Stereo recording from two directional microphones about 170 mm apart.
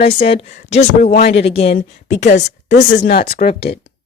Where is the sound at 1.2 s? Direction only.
80° left.